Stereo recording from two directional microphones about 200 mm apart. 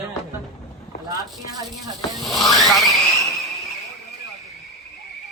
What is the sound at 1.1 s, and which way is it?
Speech, 20° right (ahead or behind).